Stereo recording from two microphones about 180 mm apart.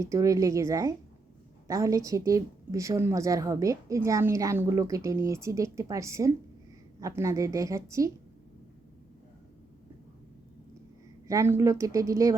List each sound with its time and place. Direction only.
0.0 s a woman's voice: 15° right (ahead or behind)
11.3 s a woman's voice: 15° right (ahead or behind)